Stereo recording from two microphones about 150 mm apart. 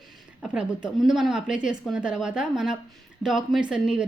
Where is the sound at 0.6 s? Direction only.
5° right (ahead or behind).